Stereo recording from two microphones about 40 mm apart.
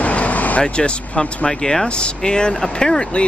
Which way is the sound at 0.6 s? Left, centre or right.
Left.